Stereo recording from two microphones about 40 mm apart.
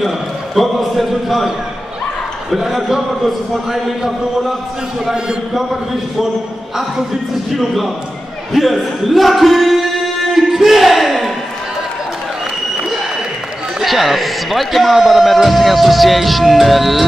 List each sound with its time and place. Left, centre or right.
0.6 s speech: centre
2.5 s speech: centre
7.5 s speech: centre
10.3 s a sound: centre
13.7 s speech: centre